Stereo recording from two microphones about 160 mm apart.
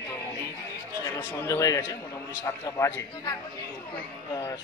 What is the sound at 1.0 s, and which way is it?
Speech, 20° left (ahead or behind).